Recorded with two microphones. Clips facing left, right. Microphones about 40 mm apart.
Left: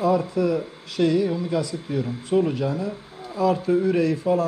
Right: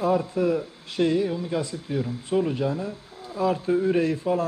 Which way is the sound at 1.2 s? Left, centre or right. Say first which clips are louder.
Left 3 dB; centre.